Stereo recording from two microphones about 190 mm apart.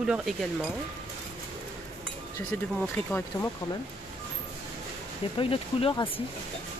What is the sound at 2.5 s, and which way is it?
Speech, 10° left (ahead or behind).